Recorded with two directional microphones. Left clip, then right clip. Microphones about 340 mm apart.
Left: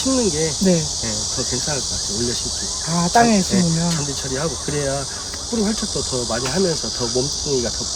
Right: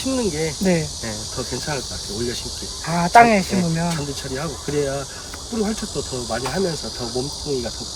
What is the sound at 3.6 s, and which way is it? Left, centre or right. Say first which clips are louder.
Speech: left 2 dB; centre.